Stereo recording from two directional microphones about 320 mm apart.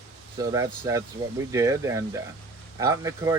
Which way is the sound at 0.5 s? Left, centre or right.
Centre.